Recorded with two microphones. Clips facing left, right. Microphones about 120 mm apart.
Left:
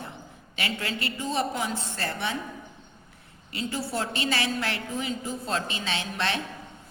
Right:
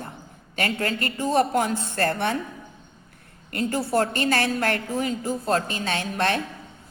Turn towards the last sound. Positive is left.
turn(degrees=-50)  # may be behind; listen again after turning